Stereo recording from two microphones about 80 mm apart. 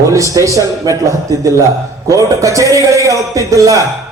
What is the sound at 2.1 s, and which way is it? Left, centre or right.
A man's voice, right.